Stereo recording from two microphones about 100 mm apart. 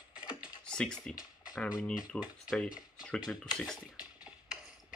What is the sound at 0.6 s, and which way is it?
Speech, 10° left (ahead or behind).